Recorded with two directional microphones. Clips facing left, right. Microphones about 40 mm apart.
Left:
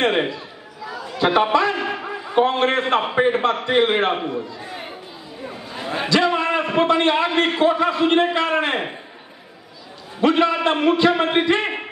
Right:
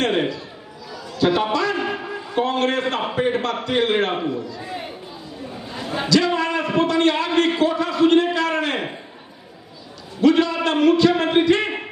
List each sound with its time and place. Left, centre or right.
0.0 s a man's voice: left
0.8 s chatter: left
2.3 s a man's voice: left
5.8 s a sound: left
10.2 s a man's voice: left